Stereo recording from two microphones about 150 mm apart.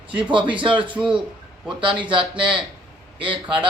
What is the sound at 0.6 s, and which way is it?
A man's voice, 35° right (ahead or behind).